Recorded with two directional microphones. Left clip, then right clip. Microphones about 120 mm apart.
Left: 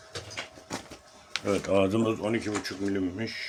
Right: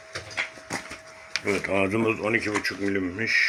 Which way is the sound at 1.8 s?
45° left (ahead or behind).